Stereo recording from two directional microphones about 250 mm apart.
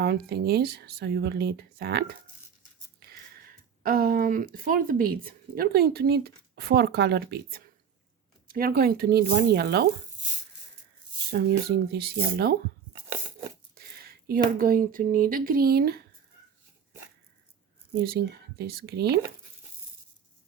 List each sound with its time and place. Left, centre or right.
0.0 s speech: right
3.0 s a sound: right
3.8 s speech: right
11.3 s speech: right
13.7 s a sound: right
14.6 s speech: right
17.9 s speech: right